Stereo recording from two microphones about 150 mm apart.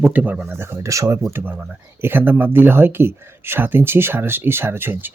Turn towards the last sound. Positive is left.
turn(degrees=-15)  # may be behind; listen again after turning